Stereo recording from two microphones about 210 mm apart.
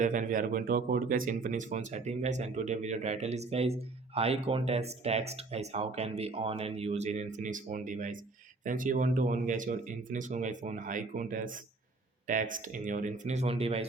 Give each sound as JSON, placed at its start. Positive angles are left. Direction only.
{"t": 0.0, "sound": "speech", "side_deg": -40}